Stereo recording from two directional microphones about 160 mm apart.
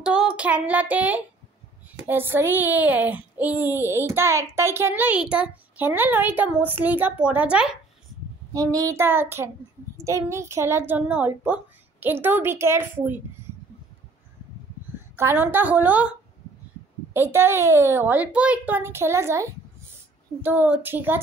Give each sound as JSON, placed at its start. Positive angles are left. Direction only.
{"t": 0.0, "sound": "child singing", "side_deg": -5}
{"t": 2.0, "sound": "speech", "side_deg": -15}
{"t": 8.5, "sound": "speech", "side_deg": -20}
{"t": 15.1, "sound": "speech", "side_deg": -10}
{"t": 17.1, "sound": "speech", "side_deg": -15}